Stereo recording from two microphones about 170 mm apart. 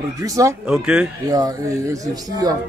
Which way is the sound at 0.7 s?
5° right (ahead or behind).